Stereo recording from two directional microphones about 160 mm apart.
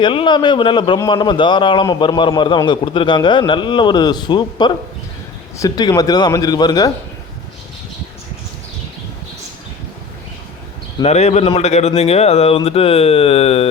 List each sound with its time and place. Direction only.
0.0 s a man's voice: 30° left (ahead or behind)
11.0 s a man's voice: 45° left (ahead or behind)